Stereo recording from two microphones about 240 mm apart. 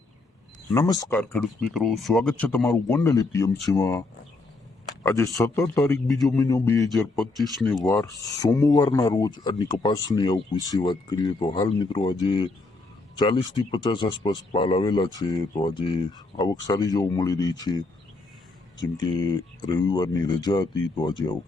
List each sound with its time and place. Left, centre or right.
0.7 s speech: centre
1.2 s speech: centre
5.0 s speech: centre
6.9 s speech: centre
18.9 s speech: centre